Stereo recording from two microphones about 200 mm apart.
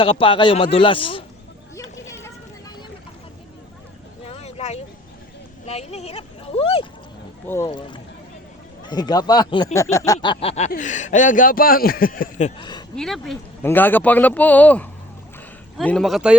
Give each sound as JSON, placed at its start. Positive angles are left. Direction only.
{"t": 0.0, "sound": "speech", "side_deg": 25}
{"t": 1.7, "sound": "a sound", "side_deg": 15}
{"t": 4.3, "sound": "a sound", "side_deg": 30}
{"t": 5.6, "sound": "speech", "side_deg": 30}
{"t": 7.4, "sound": "speech", "side_deg": 10}
{"t": 7.7, "sound": "speech", "side_deg": 25}
{"t": 13.0, "sound": "speech", "side_deg": 0}